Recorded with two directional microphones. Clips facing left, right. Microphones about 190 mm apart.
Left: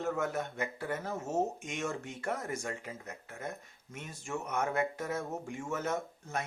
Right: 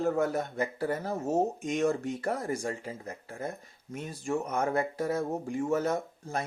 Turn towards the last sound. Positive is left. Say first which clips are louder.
# right 4 dB
turn(degrees=-35)  # may be behind; listen again after turning